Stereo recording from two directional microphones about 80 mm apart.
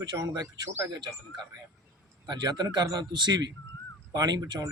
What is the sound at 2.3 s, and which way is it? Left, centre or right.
A man's voice, right.